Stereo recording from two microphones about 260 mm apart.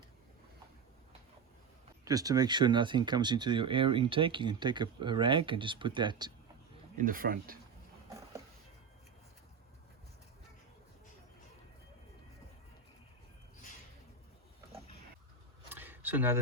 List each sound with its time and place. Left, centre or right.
2.0 s speech: centre
7.0 s speech: right
15.7 s a sound: centre